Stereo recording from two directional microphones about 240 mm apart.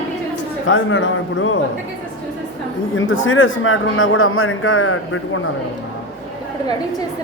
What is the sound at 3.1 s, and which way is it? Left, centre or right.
A man's voice, left.